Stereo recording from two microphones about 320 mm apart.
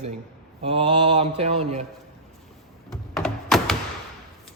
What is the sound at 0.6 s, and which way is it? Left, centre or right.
Mantra, centre.